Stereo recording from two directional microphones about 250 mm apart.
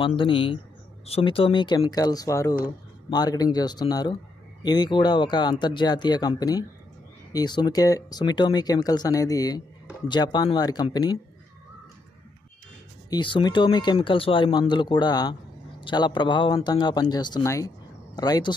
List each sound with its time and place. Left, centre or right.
0.0 s speech: centre
13.1 s speech: centre